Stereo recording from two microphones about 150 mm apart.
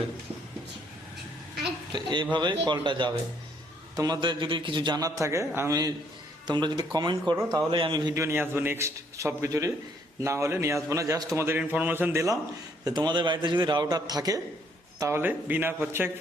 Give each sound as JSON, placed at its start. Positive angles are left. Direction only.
{"t": 1.9, "sound": "a man's voice", "side_deg": -30}